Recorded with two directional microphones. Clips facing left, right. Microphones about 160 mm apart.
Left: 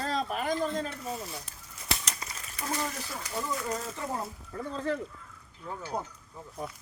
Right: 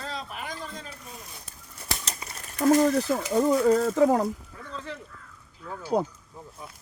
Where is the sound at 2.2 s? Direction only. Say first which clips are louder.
Right 10 dB; 45° right (ahead or behind).